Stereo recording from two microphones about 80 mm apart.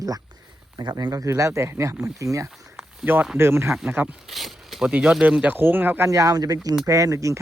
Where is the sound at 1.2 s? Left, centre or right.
Right.